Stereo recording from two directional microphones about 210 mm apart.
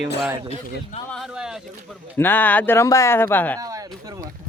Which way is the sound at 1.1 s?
Centre (ahead or behind).